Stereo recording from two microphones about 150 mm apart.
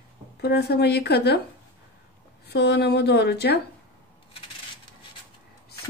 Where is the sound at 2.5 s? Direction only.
90° left.